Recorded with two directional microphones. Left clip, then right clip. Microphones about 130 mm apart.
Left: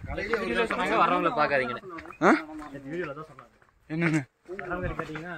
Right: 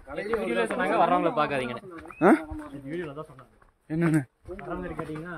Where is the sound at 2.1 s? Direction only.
50° right (ahead or behind).